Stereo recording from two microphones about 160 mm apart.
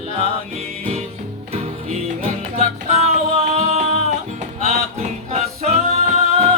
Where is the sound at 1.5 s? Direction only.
40° right (ahead or behind).